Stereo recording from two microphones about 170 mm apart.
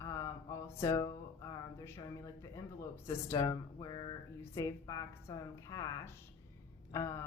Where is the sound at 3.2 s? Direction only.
20° left (ahead or behind).